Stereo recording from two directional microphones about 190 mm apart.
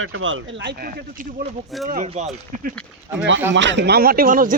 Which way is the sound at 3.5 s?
75° right (ahead or behind).